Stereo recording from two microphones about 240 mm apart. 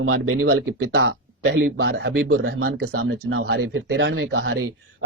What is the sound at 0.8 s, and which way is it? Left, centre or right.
Speech, right.